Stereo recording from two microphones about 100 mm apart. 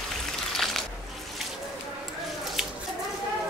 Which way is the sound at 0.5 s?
Centre (ahead or behind).